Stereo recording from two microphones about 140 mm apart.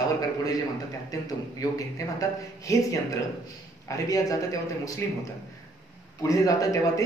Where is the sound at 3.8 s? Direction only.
25° left (ahead or behind).